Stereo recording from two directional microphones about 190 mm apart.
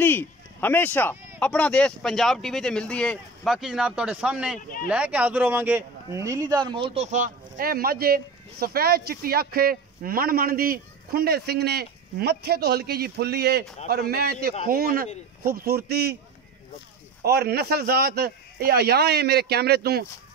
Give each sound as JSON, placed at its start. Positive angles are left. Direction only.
{"t": 0.0, "sound": "a sound", "side_deg": 10}
{"t": 1.4, "sound": "a man's voice", "side_deg": 5}
{"t": 17.2, "sound": "a man's voice", "side_deg": -55}